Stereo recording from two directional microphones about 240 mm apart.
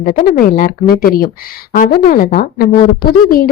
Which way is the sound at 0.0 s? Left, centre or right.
Left.